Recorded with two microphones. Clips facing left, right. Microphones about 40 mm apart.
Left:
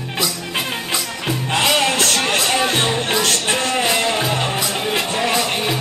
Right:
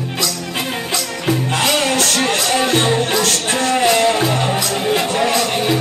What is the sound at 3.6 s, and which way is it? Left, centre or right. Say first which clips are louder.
Music: right 8 dB; centre.